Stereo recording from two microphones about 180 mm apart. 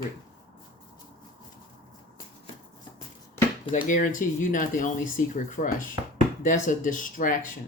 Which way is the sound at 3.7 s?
45° left (ahead or behind).